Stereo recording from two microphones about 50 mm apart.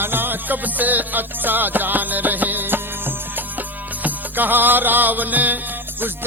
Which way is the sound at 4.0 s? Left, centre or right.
Right.